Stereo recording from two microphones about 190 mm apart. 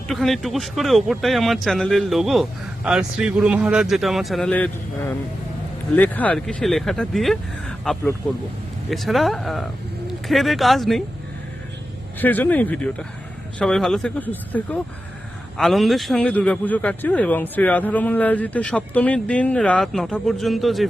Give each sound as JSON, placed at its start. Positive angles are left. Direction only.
{"t": 0.1, "sound": "speech", "side_deg": 0}
{"t": 12.2, "sound": "a man's voice", "side_deg": 10}